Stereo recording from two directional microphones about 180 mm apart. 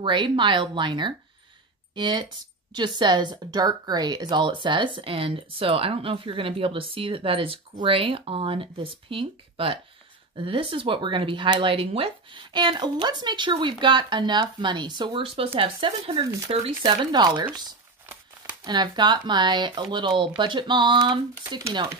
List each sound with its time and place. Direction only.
0.0 s speech: 25° right (ahead or behind)
18.6 s speech: 25° right (ahead or behind)